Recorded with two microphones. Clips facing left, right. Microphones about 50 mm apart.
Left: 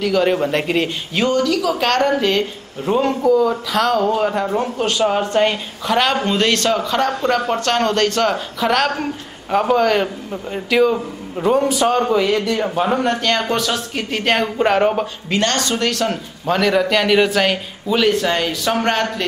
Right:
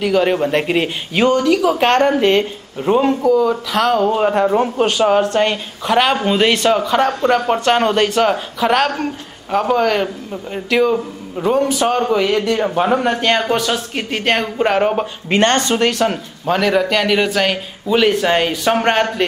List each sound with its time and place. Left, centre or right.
0.0 s speech: centre
3.2 s a man's voice: centre
3.9 s speech: centre
5.2 s speech: centre
5.9 s a man's voice: centre
15.2 s speech: right
16.1 s speech: centre